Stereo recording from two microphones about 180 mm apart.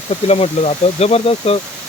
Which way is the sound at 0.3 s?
35° left (ahead or behind).